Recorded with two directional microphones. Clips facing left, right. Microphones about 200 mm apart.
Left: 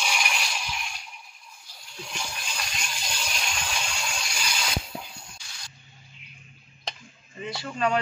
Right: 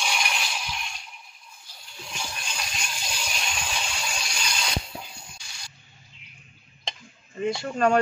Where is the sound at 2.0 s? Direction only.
Centre (ahead or behind).